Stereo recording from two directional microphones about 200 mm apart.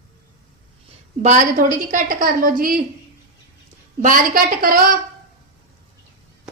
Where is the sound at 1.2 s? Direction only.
35° right (ahead or behind).